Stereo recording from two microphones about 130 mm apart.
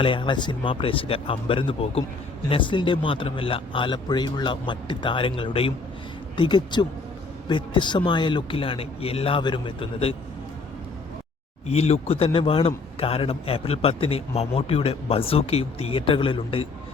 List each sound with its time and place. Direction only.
0.0 s a man's voice: 40° left (ahead or behind)
11.7 s a man's voice: 50° left (ahead or behind)